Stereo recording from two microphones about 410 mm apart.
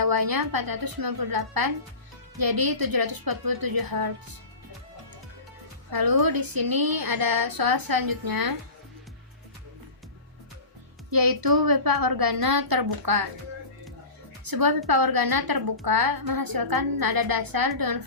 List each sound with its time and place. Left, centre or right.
0.0 s a woman's voice: right
5.9 s a woman's voice: right
11.1 s a woman's voice: right
14.4 s a woman's voice: right